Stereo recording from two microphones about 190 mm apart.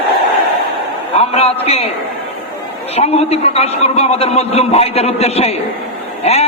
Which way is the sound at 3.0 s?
35° left (ahead or behind).